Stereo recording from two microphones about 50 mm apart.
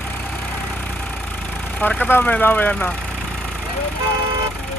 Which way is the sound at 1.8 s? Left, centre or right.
Left.